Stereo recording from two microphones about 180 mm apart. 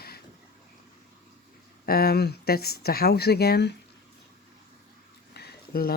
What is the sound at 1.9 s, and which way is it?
Speech, 60° left (ahead or behind).